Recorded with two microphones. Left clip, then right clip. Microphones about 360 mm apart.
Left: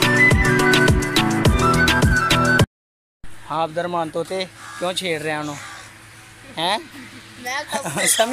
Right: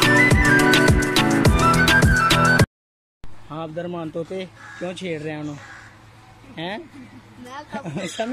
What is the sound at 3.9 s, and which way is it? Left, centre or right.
Speech, left.